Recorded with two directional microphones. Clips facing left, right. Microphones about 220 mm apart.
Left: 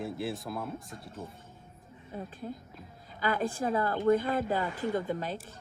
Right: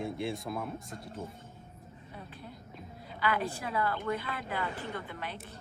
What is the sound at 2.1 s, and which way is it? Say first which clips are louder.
A woman's voice: left 9 dB; 45° left (ahead or behind).